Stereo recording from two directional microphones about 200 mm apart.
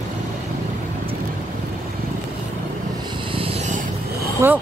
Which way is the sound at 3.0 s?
25° right (ahead or behind).